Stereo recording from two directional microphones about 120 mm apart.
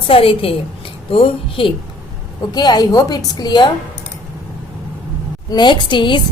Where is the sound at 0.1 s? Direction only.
50° left (ahead or behind).